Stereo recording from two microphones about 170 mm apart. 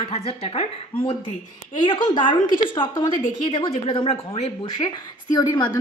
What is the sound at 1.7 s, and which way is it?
Speech, 30° left (ahead or behind).